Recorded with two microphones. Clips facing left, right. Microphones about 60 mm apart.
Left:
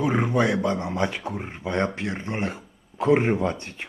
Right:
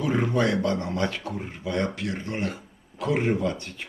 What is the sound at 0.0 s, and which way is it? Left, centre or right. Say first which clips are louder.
Speech: left 2 dB; left.